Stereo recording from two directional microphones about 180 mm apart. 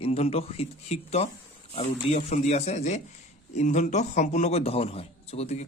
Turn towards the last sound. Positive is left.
turn(degrees=40)  # may be behind; listen again after turning